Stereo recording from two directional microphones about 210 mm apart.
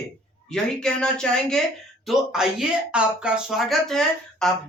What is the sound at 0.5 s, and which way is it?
Speech, 5° left (ahead or behind).